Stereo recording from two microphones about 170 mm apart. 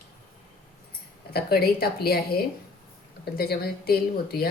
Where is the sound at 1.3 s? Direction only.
65° left (ahead or behind).